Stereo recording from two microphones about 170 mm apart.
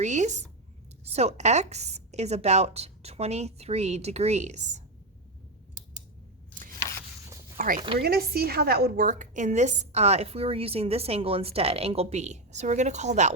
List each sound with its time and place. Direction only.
0.0 s a woman's voice: 45° right (ahead or behind)
7.5 s a woman's voice: 55° right (ahead or behind)